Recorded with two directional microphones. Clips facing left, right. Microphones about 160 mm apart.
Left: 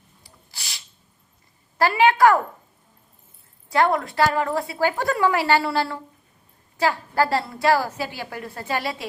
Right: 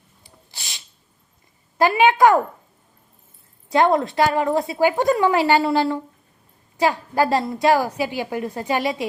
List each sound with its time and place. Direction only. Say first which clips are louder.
0.2 s a sound: right 2 dB; 20° right (ahead or behind)
1.8 s a woman's voice: right 2 dB; 20° right (ahead or behind)
3.7 s a woman's voice: right 3 dB; 20° right (ahead or behind)